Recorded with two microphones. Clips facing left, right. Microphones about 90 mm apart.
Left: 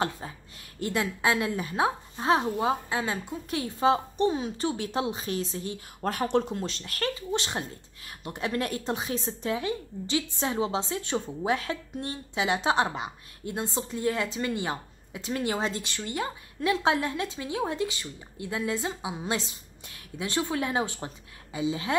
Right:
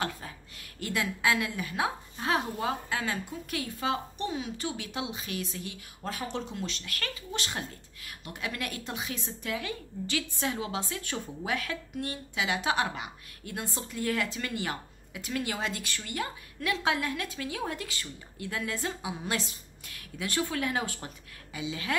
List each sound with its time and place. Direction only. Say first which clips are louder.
0.7 s a woman's voice: left 3 dB; 25° left (ahead or behind)
6.0 s speech: left 9 dB; 55° left (ahead or behind)
6.5 s a woman's voice: left 3 dB; 35° left (ahead or behind)